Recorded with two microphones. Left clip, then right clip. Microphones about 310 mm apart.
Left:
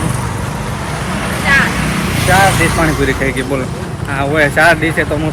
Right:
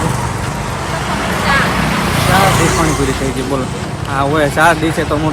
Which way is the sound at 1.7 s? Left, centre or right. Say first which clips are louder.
Right 2 dB; right.